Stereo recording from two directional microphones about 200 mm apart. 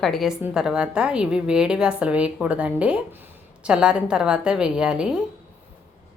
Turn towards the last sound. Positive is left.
turn(degrees=-5)  # may be behind; listen again after turning